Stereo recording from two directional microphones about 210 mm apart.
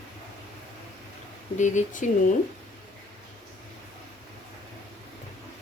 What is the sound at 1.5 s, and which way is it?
Speech, 35° left (ahead or behind).